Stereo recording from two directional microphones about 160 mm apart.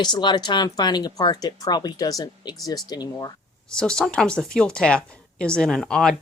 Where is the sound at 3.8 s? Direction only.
5° left (ahead or behind).